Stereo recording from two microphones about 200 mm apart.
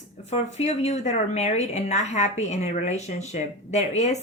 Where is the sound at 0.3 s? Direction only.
35° left (ahead or behind).